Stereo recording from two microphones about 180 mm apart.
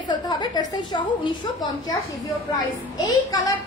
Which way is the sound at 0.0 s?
25° left (ahead or behind).